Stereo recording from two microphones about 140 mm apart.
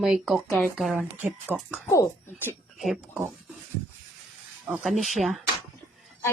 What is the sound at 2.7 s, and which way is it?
Speech, 5° right (ahead or behind).